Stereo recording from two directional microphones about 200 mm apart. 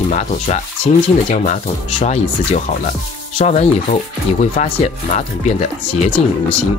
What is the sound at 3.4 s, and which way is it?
Speech, 30° left (ahead or behind).